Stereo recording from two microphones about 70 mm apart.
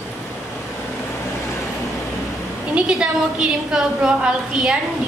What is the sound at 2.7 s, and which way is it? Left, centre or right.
A woman's voice, centre.